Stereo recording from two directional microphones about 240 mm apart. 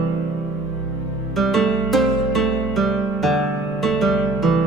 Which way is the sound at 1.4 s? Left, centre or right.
Centre.